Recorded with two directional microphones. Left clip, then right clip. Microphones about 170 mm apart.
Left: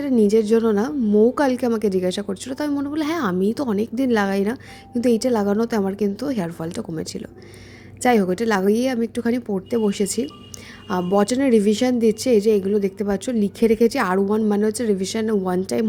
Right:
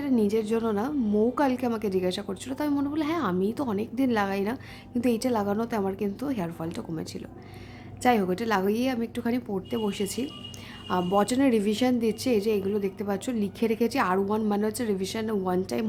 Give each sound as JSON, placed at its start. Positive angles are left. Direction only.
{"t": 0.2, "sound": "a woman's voice", "side_deg": 30}